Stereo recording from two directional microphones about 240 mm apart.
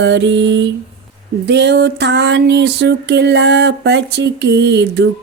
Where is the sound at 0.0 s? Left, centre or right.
Right.